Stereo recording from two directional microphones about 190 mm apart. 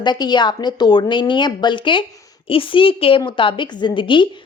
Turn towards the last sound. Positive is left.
turn(degrees=25)  # may be behind; listen again after turning